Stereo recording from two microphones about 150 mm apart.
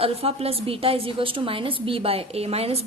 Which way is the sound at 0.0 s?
40° right (ahead or behind).